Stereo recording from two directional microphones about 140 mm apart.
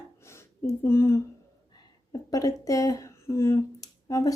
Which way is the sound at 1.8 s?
25° left (ahead or behind).